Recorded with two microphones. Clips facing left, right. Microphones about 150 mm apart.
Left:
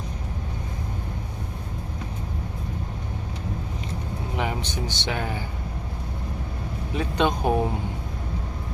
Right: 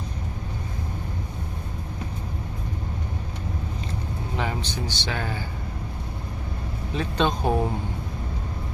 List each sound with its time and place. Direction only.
4.4 s speech: 15° left (ahead or behind)
6.9 s speech: 15° left (ahead or behind)